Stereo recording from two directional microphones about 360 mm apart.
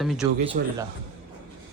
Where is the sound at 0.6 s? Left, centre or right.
Right.